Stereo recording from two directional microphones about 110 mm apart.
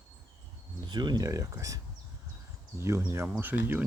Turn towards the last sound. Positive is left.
turn(degrees=-20)  # may be behind; listen again after turning